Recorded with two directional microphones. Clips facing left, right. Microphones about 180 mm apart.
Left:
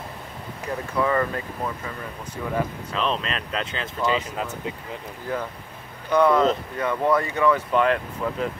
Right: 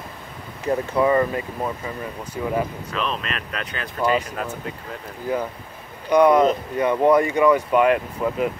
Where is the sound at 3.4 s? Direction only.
25° left (ahead or behind).